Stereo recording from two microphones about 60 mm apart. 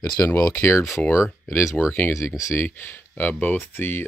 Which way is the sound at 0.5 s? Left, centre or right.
Left.